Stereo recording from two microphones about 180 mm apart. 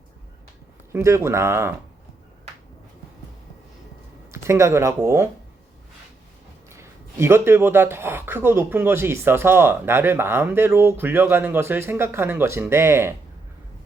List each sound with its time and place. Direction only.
0.9 s speech: 15° right (ahead or behind)
4.3 s speech: 15° right (ahead or behind)
6.7 s speech: 15° right (ahead or behind)